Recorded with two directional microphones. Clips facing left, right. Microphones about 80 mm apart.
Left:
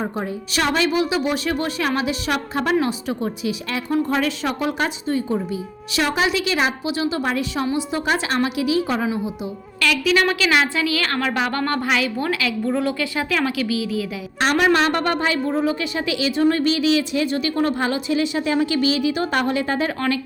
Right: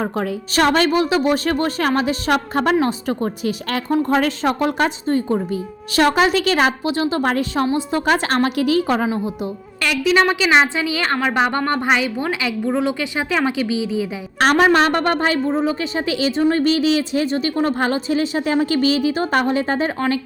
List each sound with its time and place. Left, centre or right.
0.5 s a woman's voice: right
3.8 s a woman's voice: right
9.8 s a woman's voice: right
14.5 s a woman's voice: right
15.4 s a woman's voice: right